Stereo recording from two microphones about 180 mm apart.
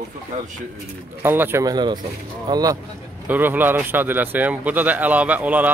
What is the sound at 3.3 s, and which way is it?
Speech, 10° right (ahead or behind).